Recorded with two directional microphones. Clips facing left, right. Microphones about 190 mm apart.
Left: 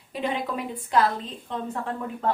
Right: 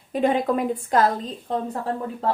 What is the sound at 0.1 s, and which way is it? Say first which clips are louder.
A woman's voice: right 8 dB; 45° right (ahead or behind).